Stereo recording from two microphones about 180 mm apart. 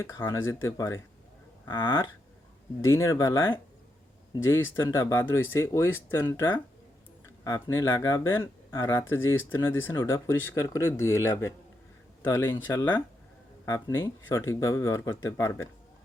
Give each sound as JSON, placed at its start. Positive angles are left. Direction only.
{"t": 0.0, "sound": "speech", "side_deg": 15}
{"t": 2.9, "sound": "speech", "side_deg": 15}
{"t": 4.4, "sound": "speech", "side_deg": 15}